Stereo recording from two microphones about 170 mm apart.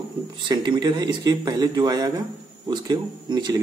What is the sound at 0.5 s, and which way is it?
Speech, 25° right (ahead or behind).